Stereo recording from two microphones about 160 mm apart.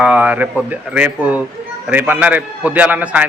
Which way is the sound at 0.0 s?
10° right (ahead or behind).